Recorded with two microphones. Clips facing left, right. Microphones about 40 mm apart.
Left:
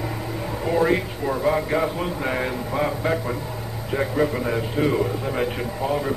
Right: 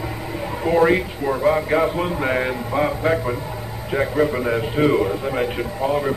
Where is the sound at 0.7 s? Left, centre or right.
Right.